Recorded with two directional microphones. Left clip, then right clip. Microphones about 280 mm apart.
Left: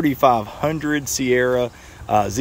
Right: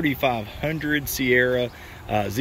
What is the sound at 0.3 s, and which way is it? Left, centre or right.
Speech, centre.